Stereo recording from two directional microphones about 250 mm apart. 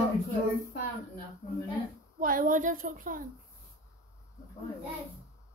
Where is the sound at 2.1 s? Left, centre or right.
Right.